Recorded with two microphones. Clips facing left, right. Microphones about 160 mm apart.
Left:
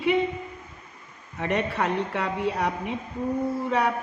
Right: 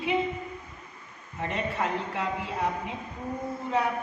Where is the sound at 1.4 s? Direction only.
70° left (ahead or behind).